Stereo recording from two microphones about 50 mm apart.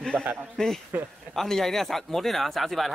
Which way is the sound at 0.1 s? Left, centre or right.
Right.